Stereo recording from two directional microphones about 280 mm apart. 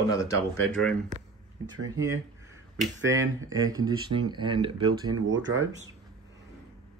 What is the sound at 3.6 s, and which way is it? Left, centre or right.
Speech, centre.